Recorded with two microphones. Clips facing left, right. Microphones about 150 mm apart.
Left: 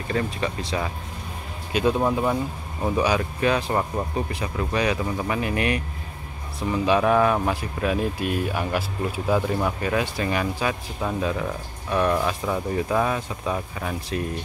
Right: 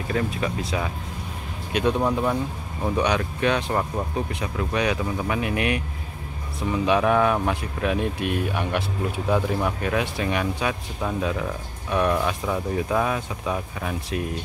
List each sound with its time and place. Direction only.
0.1 s speech: centre (ahead or behind)